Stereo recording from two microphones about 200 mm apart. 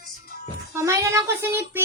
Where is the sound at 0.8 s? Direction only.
15° right (ahead or behind).